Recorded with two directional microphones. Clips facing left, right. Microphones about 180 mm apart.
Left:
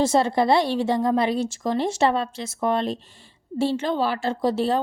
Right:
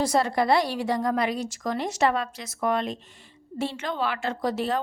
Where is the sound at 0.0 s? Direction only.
25° left (ahead or behind).